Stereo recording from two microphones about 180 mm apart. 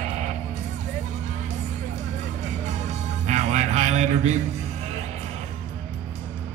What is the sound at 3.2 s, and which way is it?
Music, 40° right (ahead or behind).